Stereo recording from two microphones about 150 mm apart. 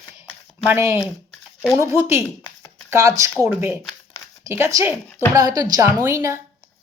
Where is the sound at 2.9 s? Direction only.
20° right (ahead or behind).